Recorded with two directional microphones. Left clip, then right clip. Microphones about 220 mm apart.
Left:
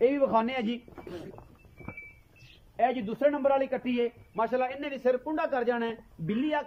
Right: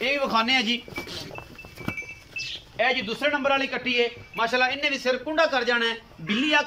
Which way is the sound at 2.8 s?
40° left (ahead or behind).